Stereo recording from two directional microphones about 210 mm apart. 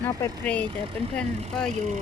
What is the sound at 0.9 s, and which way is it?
Speech, 25° right (ahead or behind).